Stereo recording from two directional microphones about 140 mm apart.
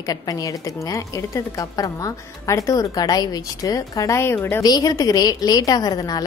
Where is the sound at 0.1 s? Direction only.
25° left (ahead or behind).